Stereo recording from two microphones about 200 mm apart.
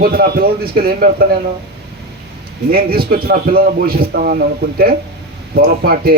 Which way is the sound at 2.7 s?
50° right (ahead or behind).